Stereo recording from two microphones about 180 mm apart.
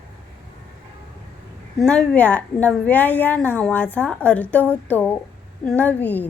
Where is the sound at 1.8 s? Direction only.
5° left (ahead or behind).